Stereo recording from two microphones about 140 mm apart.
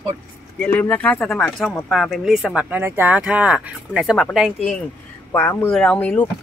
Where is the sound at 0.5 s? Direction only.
10° left (ahead or behind).